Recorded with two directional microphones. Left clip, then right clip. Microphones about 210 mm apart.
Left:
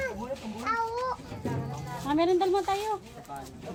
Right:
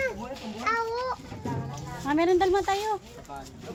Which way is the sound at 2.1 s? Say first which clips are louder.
Right 2 dB; 20° right (ahead or behind).